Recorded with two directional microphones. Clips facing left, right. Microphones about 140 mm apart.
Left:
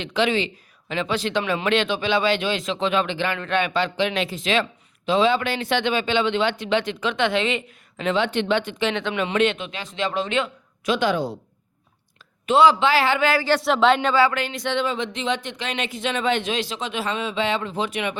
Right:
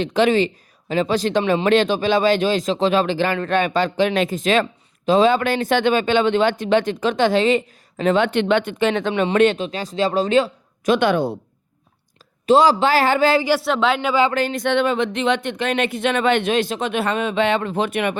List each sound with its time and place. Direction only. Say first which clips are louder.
0.0 s a man's voice: right 6 dB; 45° right (ahead or behind)
10.9 s speech: right 4 dB; 60° right (ahead or behind)
12.5 s speech: right 2 dB; 40° right (ahead or behind)
13.6 s speech: left 1 dB; centre (ahead or behind)
14.3 s speech: right 6 dB; 45° right (ahead or behind)